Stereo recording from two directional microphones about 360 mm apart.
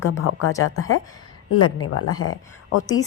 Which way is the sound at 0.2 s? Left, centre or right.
Left.